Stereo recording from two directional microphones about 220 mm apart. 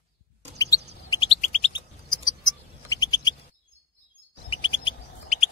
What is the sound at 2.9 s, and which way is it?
Bird, 20° left (ahead or behind).